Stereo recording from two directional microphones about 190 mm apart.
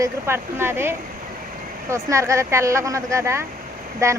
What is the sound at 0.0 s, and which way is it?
Speech, 15° right (ahead or behind).